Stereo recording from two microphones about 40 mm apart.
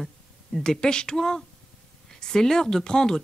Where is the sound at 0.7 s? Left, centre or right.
Centre.